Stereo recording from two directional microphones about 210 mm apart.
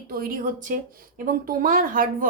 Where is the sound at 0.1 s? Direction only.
40° right (ahead or behind).